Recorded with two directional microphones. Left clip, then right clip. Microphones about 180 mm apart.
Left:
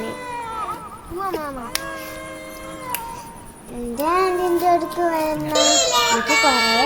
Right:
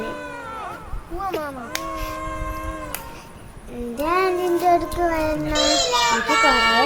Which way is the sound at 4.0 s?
Centre (ahead or behind).